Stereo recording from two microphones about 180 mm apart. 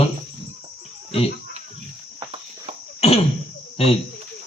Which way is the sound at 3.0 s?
35° left (ahead or behind).